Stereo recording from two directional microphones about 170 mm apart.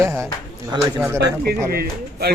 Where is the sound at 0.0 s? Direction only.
15° right (ahead or behind).